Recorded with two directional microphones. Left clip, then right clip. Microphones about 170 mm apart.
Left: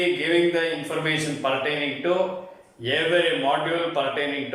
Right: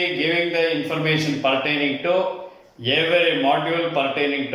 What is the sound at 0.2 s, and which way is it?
A man's voice, 5° right (ahead or behind).